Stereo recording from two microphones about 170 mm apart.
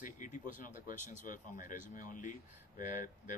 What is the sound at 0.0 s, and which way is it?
Speech, 50° left (ahead or behind).